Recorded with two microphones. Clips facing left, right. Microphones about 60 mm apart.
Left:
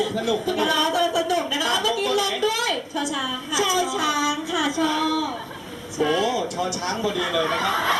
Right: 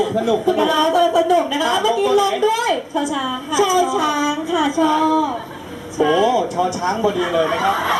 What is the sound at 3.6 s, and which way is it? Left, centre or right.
Speech, centre.